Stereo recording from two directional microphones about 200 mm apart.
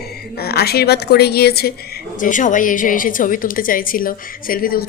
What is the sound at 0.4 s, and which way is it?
A woman's voice, 50° left (ahead or behind).